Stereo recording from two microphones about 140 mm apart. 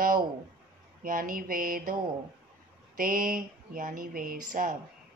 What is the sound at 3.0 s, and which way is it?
Speech, 90° right.